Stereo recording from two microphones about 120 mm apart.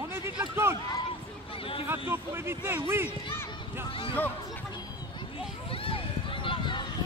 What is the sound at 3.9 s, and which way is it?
Music, 45° left (ahead or behind).